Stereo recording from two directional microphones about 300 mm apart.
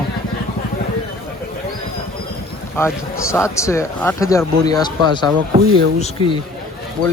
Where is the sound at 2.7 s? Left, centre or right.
Centre.